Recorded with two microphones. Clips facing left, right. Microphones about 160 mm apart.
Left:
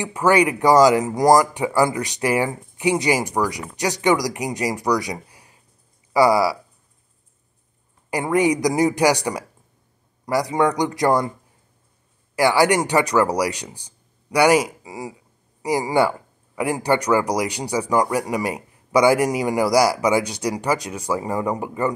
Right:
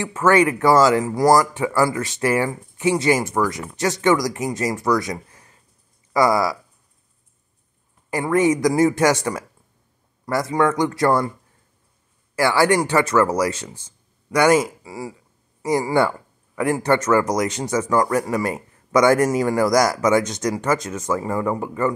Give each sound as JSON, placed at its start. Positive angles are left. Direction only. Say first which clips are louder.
{"t": 0.0, "sound": "speech", "louder": "right 1 dB", "side_deg": 15}
{"t": 8.1, "sound": "speech", "louder": "right 1 dB", "side_deg": 15}
{"t": 12.4, "sound": "speech", "louder": "even", "side_deg": 15}